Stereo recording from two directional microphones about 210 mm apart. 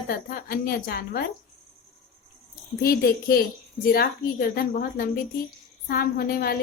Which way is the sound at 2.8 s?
45° left (ahead or behind).